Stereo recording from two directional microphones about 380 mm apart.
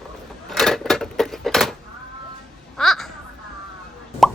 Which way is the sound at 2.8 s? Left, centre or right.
Centre.